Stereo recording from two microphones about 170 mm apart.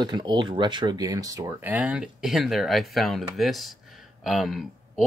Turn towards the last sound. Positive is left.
turn(degrees=0)  # may be behind; listen again after turning